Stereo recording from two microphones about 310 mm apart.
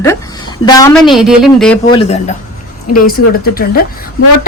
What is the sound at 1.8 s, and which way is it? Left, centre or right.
Speech, left.